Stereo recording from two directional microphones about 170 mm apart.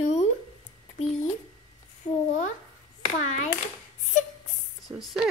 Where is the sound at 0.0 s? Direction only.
40° left (ahead or behind).